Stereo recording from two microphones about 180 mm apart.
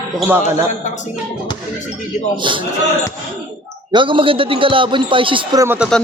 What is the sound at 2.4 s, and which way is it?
Speech, 25° right (ahead or behind).